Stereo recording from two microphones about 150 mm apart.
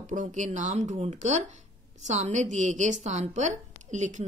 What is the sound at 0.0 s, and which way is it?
Speech, 55° right (ahead or behind).